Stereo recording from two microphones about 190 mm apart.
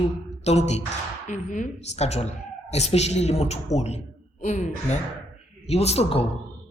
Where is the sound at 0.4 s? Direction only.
35° left (ahead or behind).